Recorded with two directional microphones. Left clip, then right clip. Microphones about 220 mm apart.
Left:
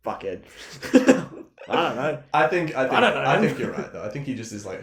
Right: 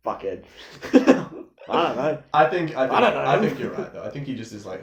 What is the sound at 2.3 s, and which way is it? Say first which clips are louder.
Speech: right 1 dB; 45° left (ahead or behind).